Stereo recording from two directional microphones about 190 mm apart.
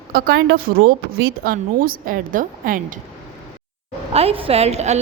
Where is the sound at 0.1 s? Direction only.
50° right (ahead or behind).